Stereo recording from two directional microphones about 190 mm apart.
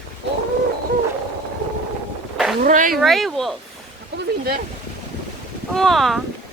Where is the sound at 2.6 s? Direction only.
45° right (ahead or behind).